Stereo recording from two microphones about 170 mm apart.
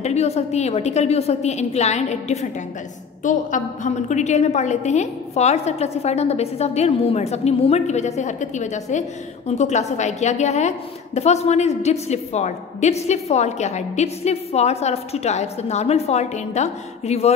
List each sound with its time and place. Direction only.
0.0 s a woman's voice: 40° left (ahead or behind)